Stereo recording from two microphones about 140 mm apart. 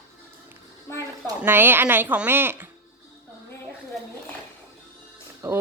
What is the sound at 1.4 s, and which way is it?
Speech, 15° right (ahead or behind).